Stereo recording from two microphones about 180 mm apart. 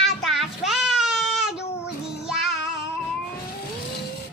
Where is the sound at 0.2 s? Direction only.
Centre (ahead or behind).